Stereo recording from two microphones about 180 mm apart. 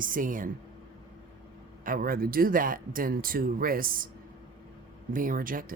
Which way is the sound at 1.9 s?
55° right (ahead or behind).